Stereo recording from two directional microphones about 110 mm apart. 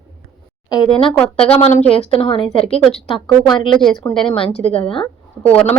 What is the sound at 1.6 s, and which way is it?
Speech, 75° left (ahead or behind).